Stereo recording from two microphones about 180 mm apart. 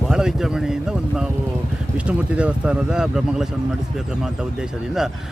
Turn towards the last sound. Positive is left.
turn(degrees=-5)  # may be behind; listen again after turning